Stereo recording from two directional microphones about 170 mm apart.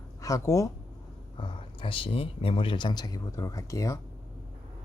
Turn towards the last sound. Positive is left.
turn(degrees=20)  # may be behind; listen again after turning